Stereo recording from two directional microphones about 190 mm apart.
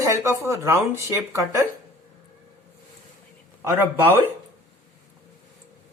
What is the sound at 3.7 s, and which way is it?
Speech, 15° right (ahead or behind).